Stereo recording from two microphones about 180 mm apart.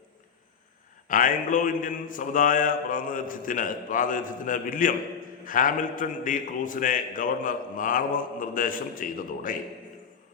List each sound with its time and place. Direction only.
1.0 s a man's voice: 50° left (ahead or behind)